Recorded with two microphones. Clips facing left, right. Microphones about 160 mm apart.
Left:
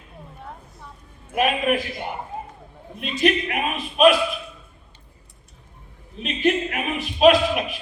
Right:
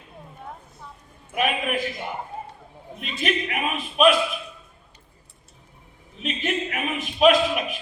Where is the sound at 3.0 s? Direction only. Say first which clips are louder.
Left 6 dB; 40° left (ahead or behind).